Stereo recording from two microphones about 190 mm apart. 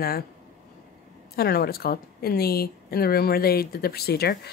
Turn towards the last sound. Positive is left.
turn(degrees=55)  # may be behind; listen again after turning